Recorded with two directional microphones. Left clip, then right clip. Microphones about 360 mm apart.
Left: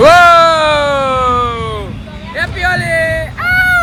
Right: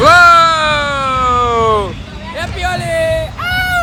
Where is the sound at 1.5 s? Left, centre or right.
Centre.